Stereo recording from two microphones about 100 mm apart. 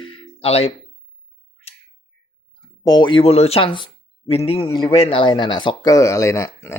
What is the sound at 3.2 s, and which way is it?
Speech, 85° left.